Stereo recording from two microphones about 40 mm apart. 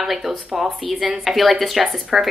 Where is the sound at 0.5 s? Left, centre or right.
Right.